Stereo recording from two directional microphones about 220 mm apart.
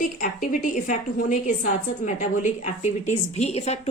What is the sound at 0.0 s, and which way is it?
A woman's voice, 40° left (ahead or behind).